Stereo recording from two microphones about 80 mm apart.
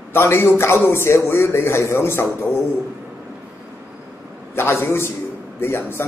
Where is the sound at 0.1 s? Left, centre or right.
Left.